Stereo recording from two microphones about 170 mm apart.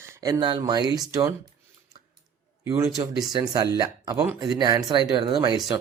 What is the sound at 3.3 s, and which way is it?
Speech, 25° right (ahead or behind).